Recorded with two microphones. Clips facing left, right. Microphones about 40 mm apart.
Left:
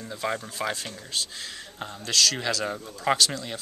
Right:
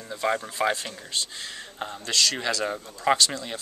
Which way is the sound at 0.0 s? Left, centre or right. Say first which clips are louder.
Right 3 dB; centre.